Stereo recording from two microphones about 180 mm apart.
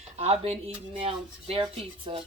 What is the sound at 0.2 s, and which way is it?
A woman's voice, 35° right (ahead or behind).